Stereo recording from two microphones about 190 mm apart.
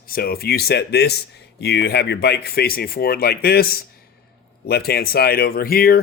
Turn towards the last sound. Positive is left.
turn(degrees=50)  # may be behind; listen again after turning